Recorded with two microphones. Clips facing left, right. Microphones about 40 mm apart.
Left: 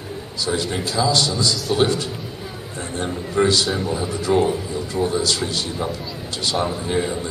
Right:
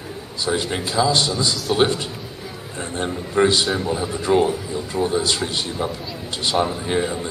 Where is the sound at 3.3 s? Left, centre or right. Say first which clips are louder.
Right 1 dB; right.